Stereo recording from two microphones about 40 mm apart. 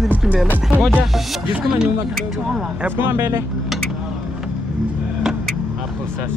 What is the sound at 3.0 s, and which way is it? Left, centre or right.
Music, right.